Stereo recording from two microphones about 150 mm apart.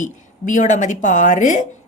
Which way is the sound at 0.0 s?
55° left (ahead or behind).